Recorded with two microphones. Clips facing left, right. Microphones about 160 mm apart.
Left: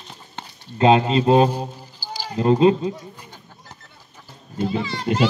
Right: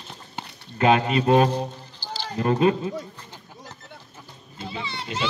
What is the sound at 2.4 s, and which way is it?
Speech, 25° left (ahead or behind).